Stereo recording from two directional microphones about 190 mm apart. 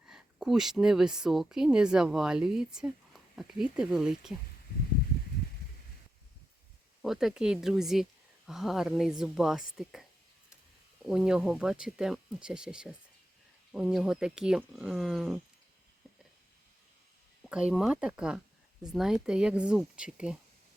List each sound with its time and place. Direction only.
0.0 s speech: 5° right (ahead or behind)
7.0 s speech: centre (ahead or behind)
17.4 s speech: 5° right (ahead or behind)